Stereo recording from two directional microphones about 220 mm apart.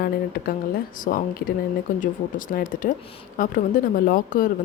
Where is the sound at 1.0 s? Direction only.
40° left (ahead or behind).